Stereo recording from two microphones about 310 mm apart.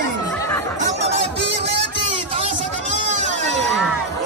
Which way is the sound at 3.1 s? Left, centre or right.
Right.